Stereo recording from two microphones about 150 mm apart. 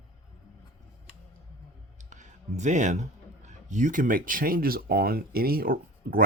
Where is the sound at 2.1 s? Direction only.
55° right (ahead or behind).